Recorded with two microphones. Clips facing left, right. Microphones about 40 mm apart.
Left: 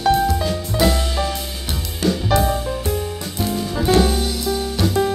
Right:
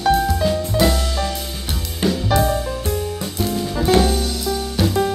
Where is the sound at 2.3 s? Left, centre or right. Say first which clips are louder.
Even; centre.